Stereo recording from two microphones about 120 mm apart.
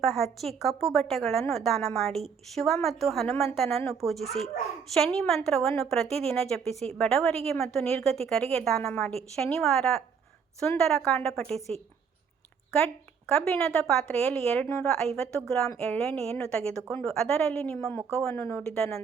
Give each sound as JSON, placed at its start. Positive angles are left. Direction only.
{"t": 0.0, "sound": "a woman's voice", "side_deg": 0}
{"t": 13.4, "sound": "a woman's voice", "side_deg": 5}
{"t": 18.6, "sound": "a woman's voice", "side_deg": 5}